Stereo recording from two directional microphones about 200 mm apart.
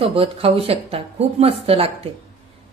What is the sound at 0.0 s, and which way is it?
Speech, 30° right (ahead or behind).